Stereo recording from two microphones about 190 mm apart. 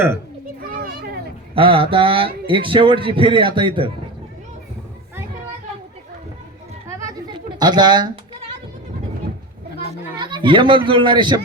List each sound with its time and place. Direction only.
0.6 s children playing: 50° right (ahead or behind)
1.5 s speech: 30° right (ahead or behind)
7.0 s a sound: 20° right (ahead or behind)
10.2 s speech: 25° right (ahead or behind)